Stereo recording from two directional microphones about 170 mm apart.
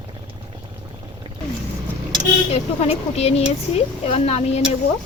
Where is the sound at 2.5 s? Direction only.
40° left (ahead or behind).